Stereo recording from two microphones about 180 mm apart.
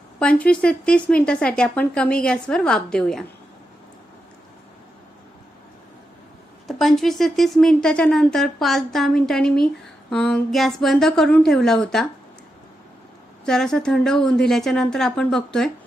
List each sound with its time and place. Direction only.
0.2 s speech: 5° left (ahead or behind)
6.7 s speech: centre (ahead or behind)
13.4 s speech: 5° left (ahead or behind)